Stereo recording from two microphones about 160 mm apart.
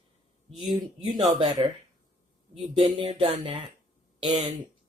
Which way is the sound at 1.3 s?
30° right (ahead or behind).